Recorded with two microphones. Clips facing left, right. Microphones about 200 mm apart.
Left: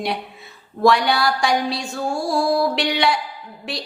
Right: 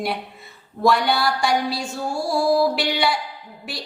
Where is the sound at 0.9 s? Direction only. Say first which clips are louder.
Left 2 dB; 70° left (ahead or behind).